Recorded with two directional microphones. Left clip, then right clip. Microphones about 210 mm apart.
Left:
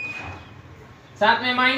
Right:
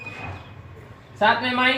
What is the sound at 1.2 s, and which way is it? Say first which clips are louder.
Speech: left 1 dB; 5° right (ahead or behind).